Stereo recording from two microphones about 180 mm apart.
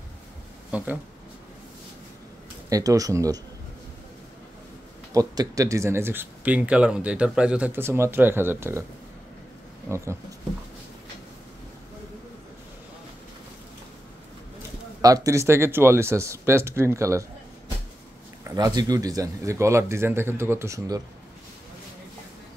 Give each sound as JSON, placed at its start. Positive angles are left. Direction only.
{"t": 0.7, "sound": "a sound", "side_deg": -10}
{"t": 2.7, "sound": "speech", "side_deg": -20}
{"t": 5.1, "sound": "speech", "side_deg": -20}
{"t": 9.8, "sound": "speech", "side_deg": -15}
{"t": 15.0, "sound": "speech", "side_deg": -20}
{"t": 18.5, "sound": "speech", "side_deg": -20}